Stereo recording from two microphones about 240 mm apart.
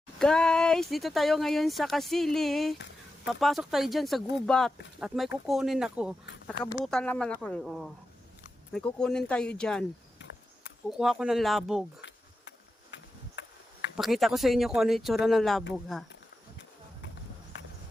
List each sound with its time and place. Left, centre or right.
0.2 s speech: centre
10.8 s speech: centre
12.9 s insect: left
13.9 s speech: centre